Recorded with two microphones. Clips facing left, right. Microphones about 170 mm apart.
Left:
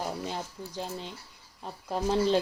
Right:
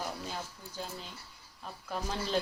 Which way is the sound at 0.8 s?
30° left (ahead or behind).